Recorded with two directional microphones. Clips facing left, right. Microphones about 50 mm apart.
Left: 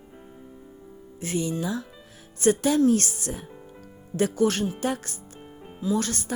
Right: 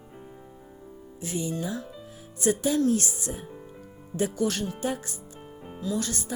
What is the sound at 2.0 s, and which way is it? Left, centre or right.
Music, left.